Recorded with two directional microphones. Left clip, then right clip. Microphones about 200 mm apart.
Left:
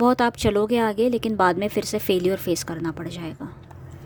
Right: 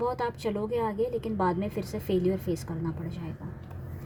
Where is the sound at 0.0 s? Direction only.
50° left (ahead or behind).